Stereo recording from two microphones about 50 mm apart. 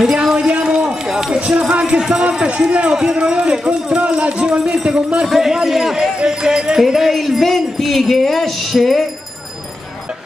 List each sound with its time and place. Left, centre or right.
0.0 s a sound: centre
1.0 s run: centre
1.7 s music: right
2.4 s a man's voice: right
5.2 s speech: centre
6.8 s speech: centre